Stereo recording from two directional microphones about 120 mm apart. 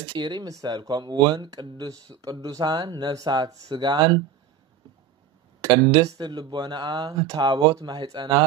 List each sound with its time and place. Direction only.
0.1 s speech: 40° right (ahead or behind)
5.6 s speech: 35° right (ahead or behind)